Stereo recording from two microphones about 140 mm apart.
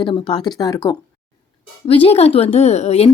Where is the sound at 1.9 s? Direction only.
45° left (ahead or behind).